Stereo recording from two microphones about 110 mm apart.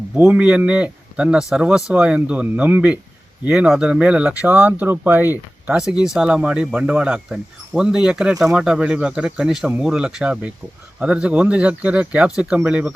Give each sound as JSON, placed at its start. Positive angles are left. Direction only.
{"t": 0.2, "sound": "speech", "side_deg": -10}
{"t": 5.7, "sound": "speech", "side_deg": -5}